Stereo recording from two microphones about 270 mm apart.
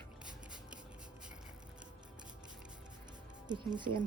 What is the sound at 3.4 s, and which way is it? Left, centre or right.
Speech, centre.